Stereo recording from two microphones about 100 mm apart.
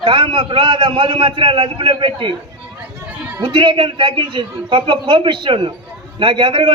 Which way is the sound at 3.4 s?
55° right (ahead or behind).